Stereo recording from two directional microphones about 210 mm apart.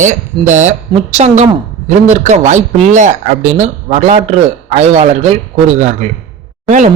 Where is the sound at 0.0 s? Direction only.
35° right (ahead or behind).